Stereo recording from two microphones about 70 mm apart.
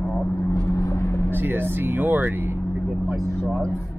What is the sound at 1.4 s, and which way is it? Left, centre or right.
Speech, right.